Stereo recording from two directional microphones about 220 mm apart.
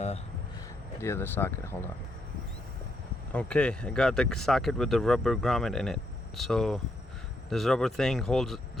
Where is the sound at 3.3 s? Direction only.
5° left (ahead or behind).